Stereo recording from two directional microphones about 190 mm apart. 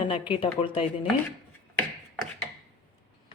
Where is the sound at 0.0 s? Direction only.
30° left (ahead or behind).